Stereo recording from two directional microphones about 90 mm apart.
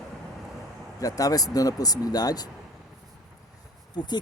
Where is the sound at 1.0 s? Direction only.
40° left (ahead or behind).